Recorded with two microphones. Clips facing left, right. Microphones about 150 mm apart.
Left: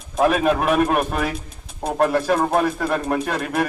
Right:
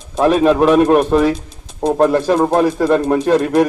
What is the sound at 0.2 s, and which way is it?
A man's voice, 30° right (ahead or behind).